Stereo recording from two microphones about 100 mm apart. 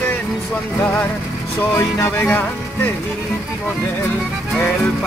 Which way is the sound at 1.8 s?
25° left (ahead or behind).